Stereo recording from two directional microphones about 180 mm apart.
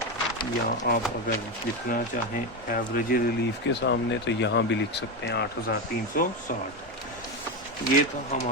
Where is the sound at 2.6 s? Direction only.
55° left (ahead or behind).